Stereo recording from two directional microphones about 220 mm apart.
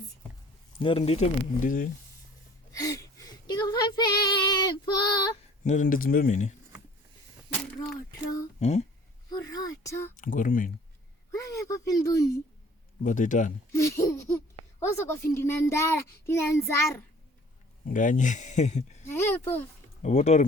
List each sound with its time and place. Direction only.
0.8 s speech: 25° left (ahead or behind)
2.7 s child singing: 15° left (ahead or behind)
5.6 s speech: 35° left (ahead or behind)
8.5 s speech: 30° left (ahead or behind)
9.5 s a sound: 15° left (ahead or behind)
10.2 s speech: 35° left (ahead or behind)
11.3 s speech: 15° left (ahead or behind)
13.0 s speech: 35° left (ahead or behind)
13.7 s a child's voice: 15° left (ahead or behind)
17.8 s speech: 35° left (ahead or behind)
19.0 s a child's voice: 10° left (ahead or behind)
20.0 s speech: 30° left (ahead or behind)